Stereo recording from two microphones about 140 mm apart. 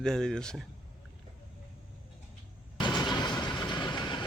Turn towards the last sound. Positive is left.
turn(degrees=35)  # may be behind; listen again after turning